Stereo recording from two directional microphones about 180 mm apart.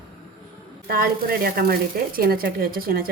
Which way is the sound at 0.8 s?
55° right (ahead or behind).